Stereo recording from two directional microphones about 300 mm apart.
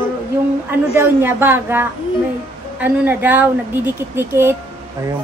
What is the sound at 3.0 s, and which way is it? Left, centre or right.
A woman's voice, centre.